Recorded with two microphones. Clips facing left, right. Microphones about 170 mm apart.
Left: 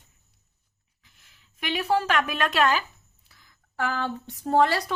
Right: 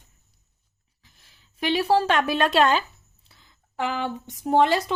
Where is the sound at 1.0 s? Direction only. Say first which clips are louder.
Right 3 dB; 35° right (ahead or behind).